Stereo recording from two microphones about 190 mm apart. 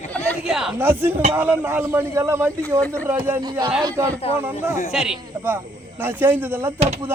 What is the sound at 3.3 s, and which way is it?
A man's voice, 20° right (ahead or behind).